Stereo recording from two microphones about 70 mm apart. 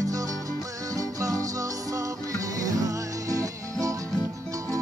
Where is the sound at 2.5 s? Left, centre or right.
Right.